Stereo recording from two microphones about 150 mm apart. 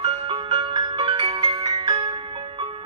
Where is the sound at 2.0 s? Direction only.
40° right (ahead or behind).